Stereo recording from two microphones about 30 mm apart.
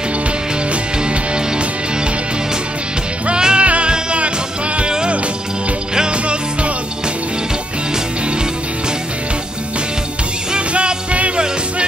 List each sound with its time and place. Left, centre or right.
3.3 s music: right
3.6 s music: right
10.7 s music: right